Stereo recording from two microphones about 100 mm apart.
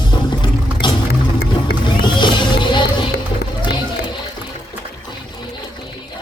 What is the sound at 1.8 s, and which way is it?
Music, 50° left (ahead or behind).